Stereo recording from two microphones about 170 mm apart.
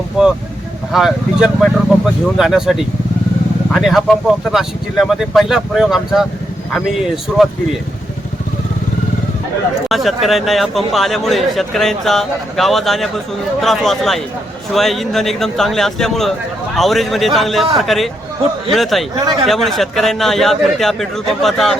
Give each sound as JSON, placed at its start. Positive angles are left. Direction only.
{"t": 0.2, "sound": "speech", "side_deg": 0}
{"t": 9.9, "sound": "speech", "side_deg": 0}
{"t": 19.1, "sound": "speech", "side_deg": -25}
{"t": 19.5, "sound": "speech", "side_deg": 0}